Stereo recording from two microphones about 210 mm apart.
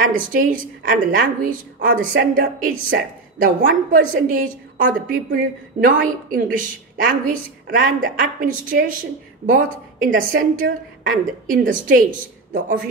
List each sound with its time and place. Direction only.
0.1 s a woman's voice: 40° right (ahead or behind)